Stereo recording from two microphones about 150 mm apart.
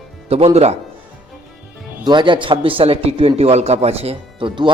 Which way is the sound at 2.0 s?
30° right (ahead or behind).